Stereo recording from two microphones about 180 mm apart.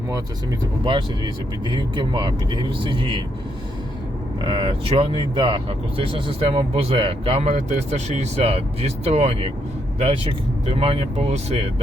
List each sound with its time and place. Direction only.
0.9 s speech: 25° right (ahead or behind)
4.4 s speech: 25° right (ahead or behind)